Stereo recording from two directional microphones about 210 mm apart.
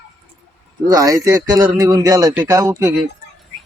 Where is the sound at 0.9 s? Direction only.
15° right (ahead or behind).